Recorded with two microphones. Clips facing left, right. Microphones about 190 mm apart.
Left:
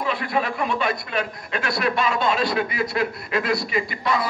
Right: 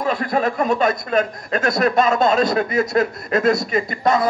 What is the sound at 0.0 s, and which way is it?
Speech, 45° right (ahead or behind).